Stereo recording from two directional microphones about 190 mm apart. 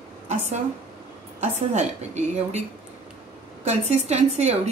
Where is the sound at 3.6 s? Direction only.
35° right (ahead or behind).